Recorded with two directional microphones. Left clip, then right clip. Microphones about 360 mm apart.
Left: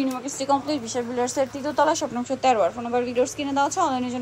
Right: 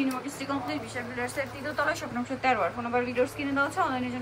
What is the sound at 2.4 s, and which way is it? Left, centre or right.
A woman's voice, centre.